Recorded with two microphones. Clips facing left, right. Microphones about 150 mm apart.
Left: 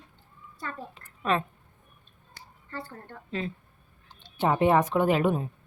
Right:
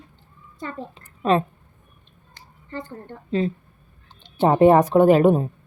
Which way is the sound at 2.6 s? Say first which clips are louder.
Right 6 dB; 20° right (ahead or behind).